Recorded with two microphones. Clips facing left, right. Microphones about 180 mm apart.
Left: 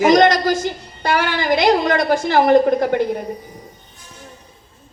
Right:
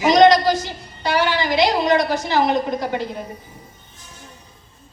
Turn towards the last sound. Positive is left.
turn(degrees=55)  # may be behind; listen again after turning